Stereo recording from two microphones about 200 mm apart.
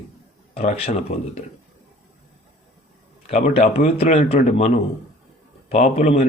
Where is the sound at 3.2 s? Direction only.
35° left (ahead or behind).